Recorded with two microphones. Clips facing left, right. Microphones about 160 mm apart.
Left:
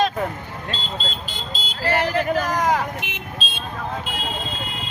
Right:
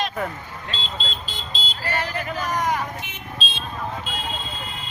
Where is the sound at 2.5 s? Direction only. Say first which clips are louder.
Left 3 dB; 90° left.